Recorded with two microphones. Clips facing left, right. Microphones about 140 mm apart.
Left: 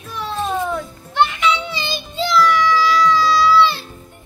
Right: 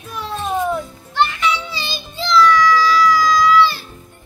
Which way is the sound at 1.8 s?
20° left (ahead or behind).